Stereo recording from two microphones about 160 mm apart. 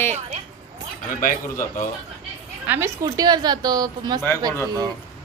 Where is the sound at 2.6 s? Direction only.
15° right (ahead or behind).